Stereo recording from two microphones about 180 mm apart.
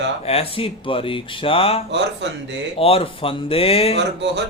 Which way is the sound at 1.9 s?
80° right.